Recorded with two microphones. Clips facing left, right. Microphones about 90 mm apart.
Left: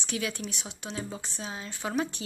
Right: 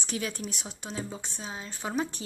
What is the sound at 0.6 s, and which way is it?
Speech, 5° right (ahead or behind).